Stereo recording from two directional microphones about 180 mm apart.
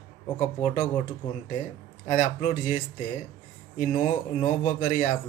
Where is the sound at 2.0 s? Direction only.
45° left (ahead or behind).